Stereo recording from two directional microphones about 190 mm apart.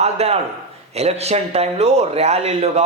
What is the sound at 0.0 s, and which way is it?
Speech, 35° right (ahead or behind).